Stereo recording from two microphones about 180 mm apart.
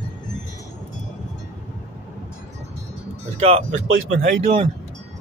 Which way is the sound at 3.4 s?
35° right (ahead or behind).